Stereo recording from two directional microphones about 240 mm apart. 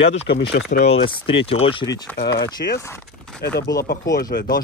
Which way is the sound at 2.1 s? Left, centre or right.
Left.